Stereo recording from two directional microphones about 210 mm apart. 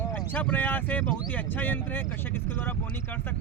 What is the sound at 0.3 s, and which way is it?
Speech, 10° left (ahead or behind).